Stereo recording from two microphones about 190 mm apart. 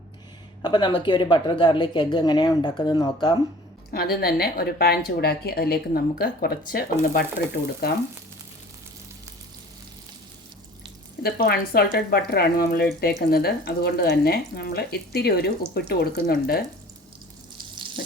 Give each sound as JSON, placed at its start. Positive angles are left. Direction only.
{"t": 0.6, "sound": "speech", "side_deg": 25}
{"t": 3.9, "sound": "speech", "side_deg": 55}
{"t": 11.2, "sound": "speech", "side_deg": 55}